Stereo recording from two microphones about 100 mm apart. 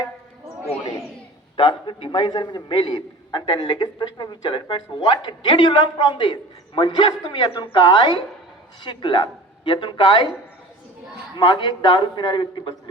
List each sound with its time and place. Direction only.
1.5 s a man's voice: 55° left (ahead or behind)
7.1 s a man's voice: 40° left (ahead or behind)
11.3 s a man's voice: 45° left (ahead or behind)